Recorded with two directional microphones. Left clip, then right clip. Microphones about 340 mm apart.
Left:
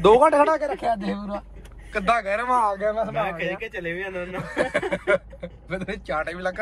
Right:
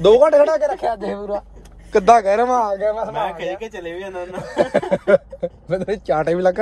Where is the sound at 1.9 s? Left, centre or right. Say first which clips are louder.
Right 10 dB; centre.